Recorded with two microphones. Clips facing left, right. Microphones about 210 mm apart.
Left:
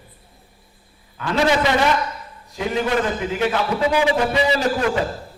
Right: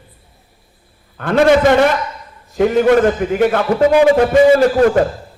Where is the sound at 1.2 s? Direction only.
55° right (ahead or behind).